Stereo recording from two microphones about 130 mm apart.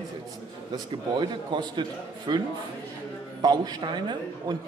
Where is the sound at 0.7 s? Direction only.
35° right (ahead or behind).